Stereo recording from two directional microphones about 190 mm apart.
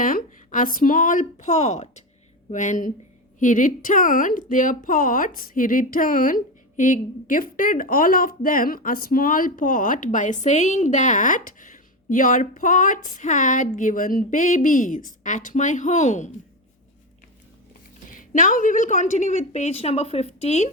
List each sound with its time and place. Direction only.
0.0 s a woman's voice: 45° left (ahead or behind)
18.1 s a woman's voice: 45° left (ahead or behind)